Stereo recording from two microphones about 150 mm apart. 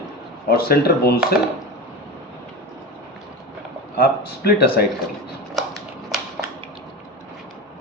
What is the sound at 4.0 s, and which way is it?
Speech, 90° left.